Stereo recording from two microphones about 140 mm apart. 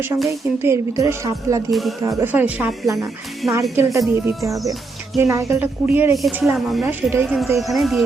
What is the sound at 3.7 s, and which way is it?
Speech, 20° right (ahead or behind).